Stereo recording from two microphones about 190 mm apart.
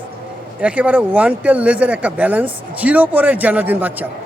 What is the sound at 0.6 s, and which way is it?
Speech, 5° right (ahead or behind).